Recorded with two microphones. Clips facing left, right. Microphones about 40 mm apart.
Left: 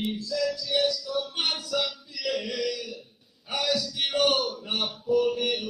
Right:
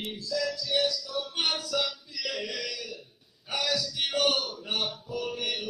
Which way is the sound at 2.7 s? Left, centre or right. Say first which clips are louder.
Left 6 dB; centre.